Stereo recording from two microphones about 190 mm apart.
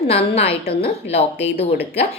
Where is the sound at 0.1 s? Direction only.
30° left (ahead or behind).